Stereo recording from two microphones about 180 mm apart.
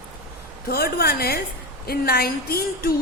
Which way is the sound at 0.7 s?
55° left (ahead or behind).